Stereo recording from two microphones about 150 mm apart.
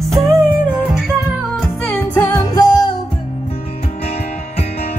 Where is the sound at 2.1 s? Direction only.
20° left (ahead or behind).